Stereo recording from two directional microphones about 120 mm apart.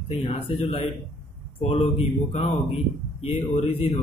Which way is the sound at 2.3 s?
70° left (ahead or behind).